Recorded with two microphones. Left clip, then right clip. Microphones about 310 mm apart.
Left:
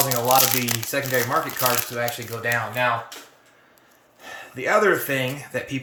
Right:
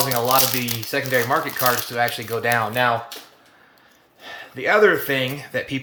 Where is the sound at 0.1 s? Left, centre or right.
Centre.